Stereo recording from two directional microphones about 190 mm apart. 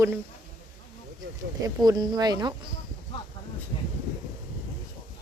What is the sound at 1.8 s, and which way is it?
Speech, 20° right (ahead or behind).